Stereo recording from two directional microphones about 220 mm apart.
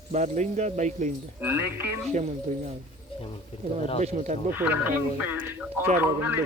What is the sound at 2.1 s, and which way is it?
Speech, 30° right (ahead or behind).